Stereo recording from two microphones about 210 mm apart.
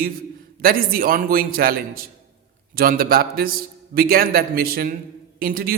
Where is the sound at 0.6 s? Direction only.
45° right (ahead or behind).